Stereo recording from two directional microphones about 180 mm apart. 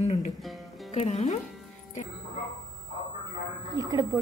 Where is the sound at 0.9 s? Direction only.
35° left (ahead or behind).